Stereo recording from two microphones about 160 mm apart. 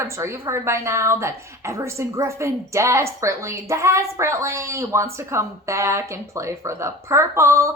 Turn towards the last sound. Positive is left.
turn(degrees=-20)  # may be behind; listen again after turning